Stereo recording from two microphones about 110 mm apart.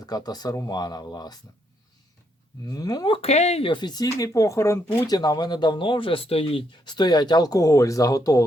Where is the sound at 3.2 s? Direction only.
80° left.